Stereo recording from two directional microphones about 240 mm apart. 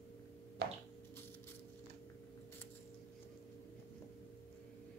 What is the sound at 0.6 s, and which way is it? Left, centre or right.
Squish, right.